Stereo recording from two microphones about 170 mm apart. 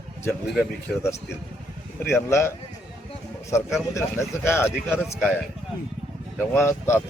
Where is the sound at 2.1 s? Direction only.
15° left (ahead or behind).